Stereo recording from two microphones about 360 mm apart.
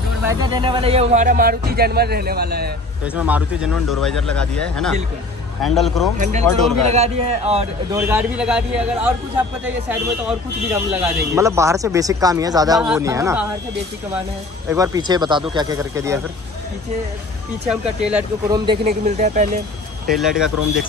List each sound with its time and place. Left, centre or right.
0.2 s speech: centre; by 2.7 s right
3.2 s speech: centre
6.1 s speech: right
8.1 s speech: centre
14.7 s speech: centre
17.6 s speech: centre
18.9 s speech: centre
20.1 s speech: centre